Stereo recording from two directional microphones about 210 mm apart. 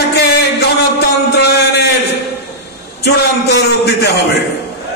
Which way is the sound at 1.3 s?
50° left (ahead or behind).